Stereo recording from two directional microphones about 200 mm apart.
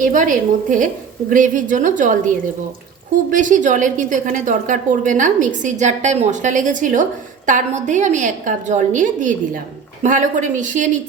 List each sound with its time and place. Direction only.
0.0 s a woman's voice: 40° right (ahead or behind)